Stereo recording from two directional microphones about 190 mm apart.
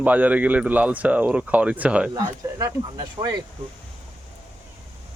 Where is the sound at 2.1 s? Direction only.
20° right (ahead or behind).